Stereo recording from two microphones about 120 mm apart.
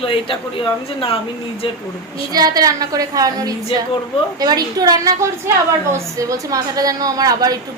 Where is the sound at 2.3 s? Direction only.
30° right (ahead or behind).